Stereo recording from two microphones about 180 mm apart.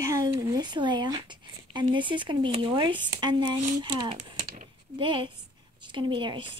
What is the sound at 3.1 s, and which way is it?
A woman's voice, 25° right (ahead or behind).